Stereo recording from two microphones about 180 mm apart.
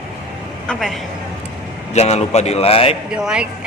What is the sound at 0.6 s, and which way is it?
Speech, centre (ahead or behind).